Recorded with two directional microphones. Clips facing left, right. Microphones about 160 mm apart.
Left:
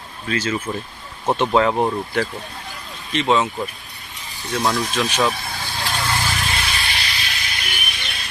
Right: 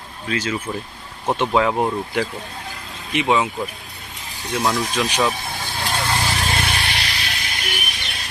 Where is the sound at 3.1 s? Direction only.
10° right (ahead or behind).